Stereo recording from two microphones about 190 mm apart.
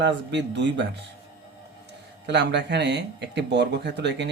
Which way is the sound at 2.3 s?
65° right (ahead or behind).